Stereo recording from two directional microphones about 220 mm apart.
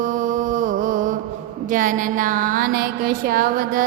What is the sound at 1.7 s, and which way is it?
Music, 35° right (ahead or behind).